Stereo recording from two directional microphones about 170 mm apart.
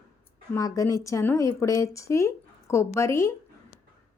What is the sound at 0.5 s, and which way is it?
A woman's voice, 20° left (ahead or behind).